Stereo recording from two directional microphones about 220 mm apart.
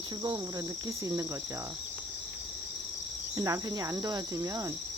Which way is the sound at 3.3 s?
15° right (ahead or behind).